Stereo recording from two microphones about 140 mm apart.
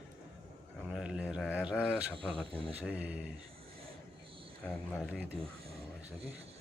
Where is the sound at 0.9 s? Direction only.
5° right (ahead or behind).